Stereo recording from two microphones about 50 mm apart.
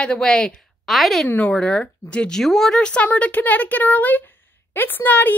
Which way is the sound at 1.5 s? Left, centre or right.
Left.